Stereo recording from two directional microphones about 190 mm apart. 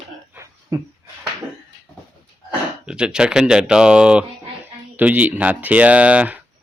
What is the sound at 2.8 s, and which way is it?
Speech, 5° right (ahead or behind).